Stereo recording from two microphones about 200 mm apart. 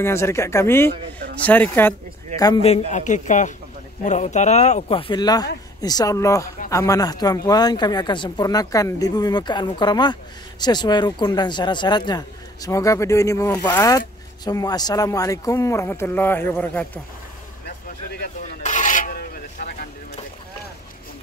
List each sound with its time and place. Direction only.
0.0 s speech: 15° left (ahead or behind)
2.9 s speech: 40° left (ahead or behind); by 17.0 s 10° left (ahead or behind)
18.6 s filing: 40° left (ahead or behind)